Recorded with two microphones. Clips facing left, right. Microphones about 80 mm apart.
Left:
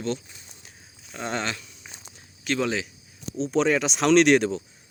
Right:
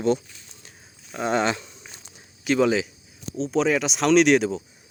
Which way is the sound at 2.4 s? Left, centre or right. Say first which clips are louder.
Right 6 dB; centre.